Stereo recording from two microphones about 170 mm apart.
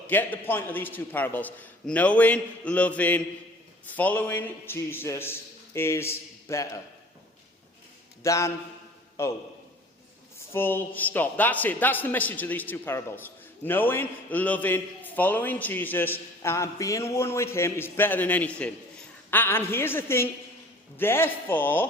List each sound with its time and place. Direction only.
0.1 s a man's voice: 10° left (ahead or behind)
8.2 s a man's voice: 15° left (ahead or behind)
10.5 s a man's voice: 15° left (ahead or behind)